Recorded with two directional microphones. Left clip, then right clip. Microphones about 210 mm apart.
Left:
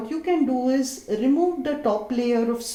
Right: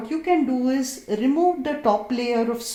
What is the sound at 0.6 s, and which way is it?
Speech, 45° right (ahead or behind).